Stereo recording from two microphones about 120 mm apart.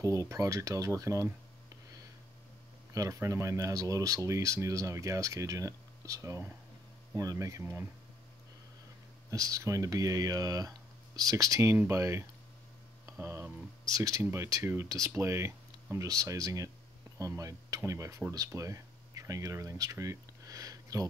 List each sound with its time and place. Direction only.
0.0 s speech: 25° right (ahead or behind)
2.9 s speech: 25° right (ahead or behind)
9.3 s speech: 25° right (ahead or behind)